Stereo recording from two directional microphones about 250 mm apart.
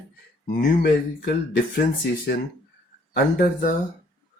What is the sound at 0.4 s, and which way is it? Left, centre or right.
Speech, left.